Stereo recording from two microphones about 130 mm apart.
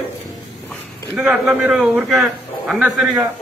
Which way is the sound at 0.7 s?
5° right (ahead or behind).